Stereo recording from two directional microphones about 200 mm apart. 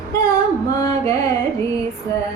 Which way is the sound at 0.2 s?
20° left (ahead or behind).